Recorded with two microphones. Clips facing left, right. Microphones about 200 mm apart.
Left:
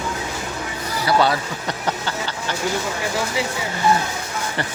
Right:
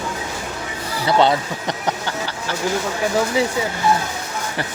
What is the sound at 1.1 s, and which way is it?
Speech, 20° right (ahead or behind).